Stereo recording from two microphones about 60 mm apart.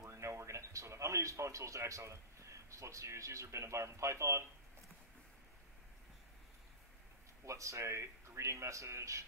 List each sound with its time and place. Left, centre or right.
0.0 s speech: right
7.4 s speech: right